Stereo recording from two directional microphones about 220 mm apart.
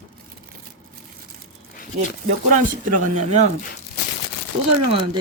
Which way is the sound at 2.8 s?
35° right (ahead or behind).